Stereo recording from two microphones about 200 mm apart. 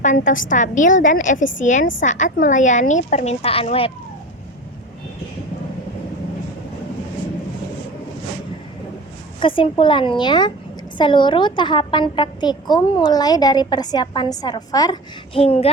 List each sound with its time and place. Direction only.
0.0 s a woman's voice: 40° left (ahead or behind)
9.4 s a woman's voice: 25° left (ahead or behind)